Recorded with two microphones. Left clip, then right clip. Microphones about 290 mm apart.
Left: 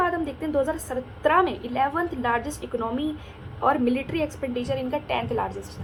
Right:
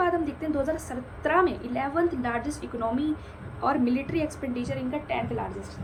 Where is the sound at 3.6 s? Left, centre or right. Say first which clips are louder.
Left 3 dB; centre.